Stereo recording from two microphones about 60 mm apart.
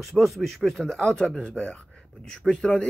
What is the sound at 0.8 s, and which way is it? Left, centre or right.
A man's voice, centre.